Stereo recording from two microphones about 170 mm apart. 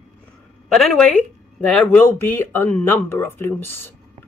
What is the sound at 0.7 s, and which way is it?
Speech, centre (ahead or behind).